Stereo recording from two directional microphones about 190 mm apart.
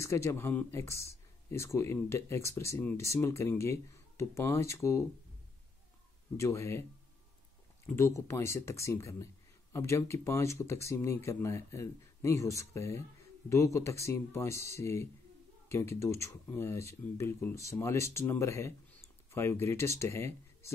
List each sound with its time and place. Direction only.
0.0 s speech: 15° left (ahead or behind)
6.3 s speech: 15° left (ahead or behind)